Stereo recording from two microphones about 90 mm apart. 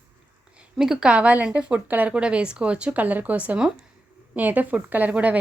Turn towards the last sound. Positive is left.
turn(degrees=-15)  # may be behind; listen again after turning